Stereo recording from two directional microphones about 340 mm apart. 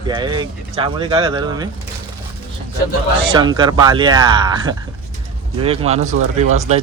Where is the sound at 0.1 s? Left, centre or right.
Centre.